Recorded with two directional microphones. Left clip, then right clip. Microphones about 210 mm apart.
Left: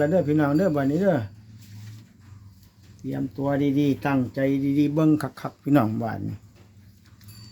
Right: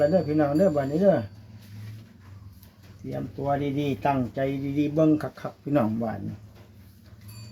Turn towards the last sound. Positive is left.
turn(degrees=45)  # may be behind; listen again after turning